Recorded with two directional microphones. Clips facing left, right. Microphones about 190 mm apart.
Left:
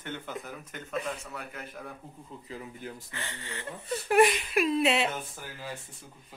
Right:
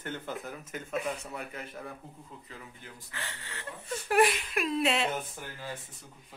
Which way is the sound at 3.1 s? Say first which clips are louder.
Left 3 dB; centre (ahead or behind).